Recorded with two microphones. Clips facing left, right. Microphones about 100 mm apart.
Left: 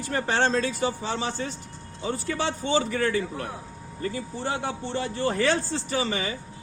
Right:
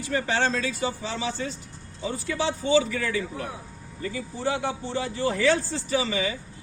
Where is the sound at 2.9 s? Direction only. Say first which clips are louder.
Left 3 dB; 50° left (ahead or behind).